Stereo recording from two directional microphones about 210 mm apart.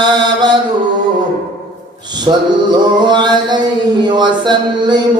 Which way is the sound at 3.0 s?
20° right (ahead or behind).